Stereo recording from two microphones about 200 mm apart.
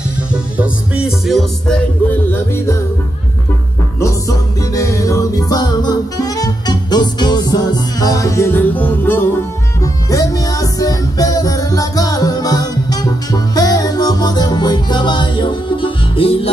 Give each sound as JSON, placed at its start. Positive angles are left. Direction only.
{"t": 0.3, "sound": "music", "side_deg": -5}
{"t": 2.3, "sound": "music", "side_deg": 15}
{"t": 4.0, "sound": "music", "side_deg": 15}